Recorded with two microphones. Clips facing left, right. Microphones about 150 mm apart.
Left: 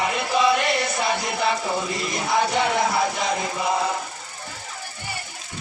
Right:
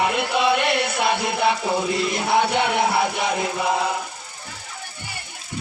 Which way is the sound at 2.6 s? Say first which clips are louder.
Right 1 dB; 65° right (ahead or behind).